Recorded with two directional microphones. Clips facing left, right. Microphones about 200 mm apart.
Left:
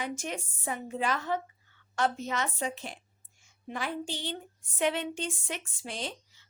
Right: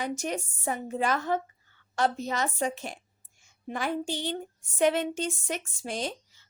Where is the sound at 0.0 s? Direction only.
40° right (ahead or behind).